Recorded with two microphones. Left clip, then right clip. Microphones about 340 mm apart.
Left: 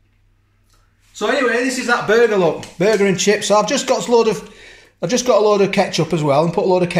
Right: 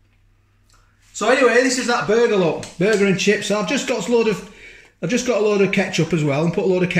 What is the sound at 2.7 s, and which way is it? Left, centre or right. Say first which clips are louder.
Speech: left 1 dB; centre.